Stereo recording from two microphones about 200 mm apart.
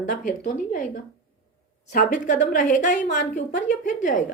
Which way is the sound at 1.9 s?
40° left (ahead or behind).